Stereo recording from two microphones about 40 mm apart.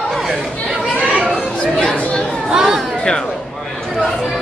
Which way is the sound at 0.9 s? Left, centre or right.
Right.